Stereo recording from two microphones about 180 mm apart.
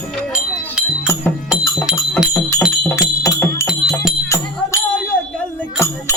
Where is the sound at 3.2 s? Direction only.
15° left (ahead or behind).